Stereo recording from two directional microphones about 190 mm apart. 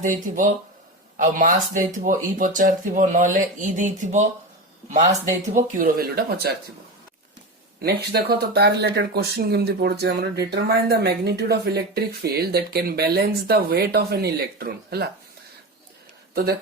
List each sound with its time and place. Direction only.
0.0 s speech: 45° right (ahead or behind)
5.5 s speech: 45° right (ahead or behind)
7.8 s speech: 55° right (ahead or behind)
16.3 s speech: 55° right (ahead or behind)